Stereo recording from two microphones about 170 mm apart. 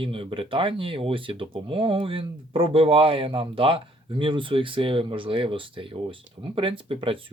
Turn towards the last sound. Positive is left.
turn(degrees=-30)  # may be behind; listen again after turning